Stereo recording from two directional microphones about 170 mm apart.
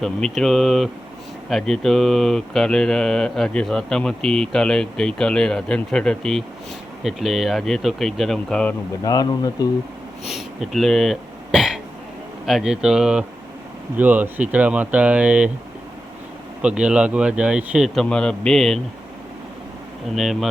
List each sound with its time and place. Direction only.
0.0 s speech: centre (ahead or behind)
9.0 s speech: 20° left (ahead or behind)
10.2 s speech: centre (ahead or behind)
16.6 s speech: 5° right (ahead or behind)
20.1 s speech: centre (ahead or behind)